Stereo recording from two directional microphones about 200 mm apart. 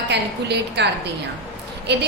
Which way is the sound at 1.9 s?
60° right (ahead or behind).